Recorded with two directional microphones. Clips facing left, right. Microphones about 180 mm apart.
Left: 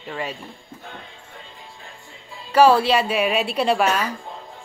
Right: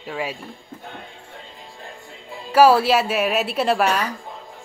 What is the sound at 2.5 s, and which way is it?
Speech, 5° right (ahead or behind).